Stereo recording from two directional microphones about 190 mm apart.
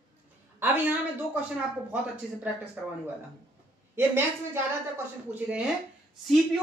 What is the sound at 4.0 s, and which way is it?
A woman's voice, 10° right (ahead or behind).